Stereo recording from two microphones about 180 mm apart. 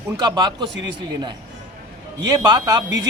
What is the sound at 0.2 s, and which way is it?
Speech, 25° right (ahead or behind).